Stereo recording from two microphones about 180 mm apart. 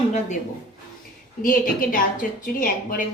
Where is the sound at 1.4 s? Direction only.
50° left (ahead or behind).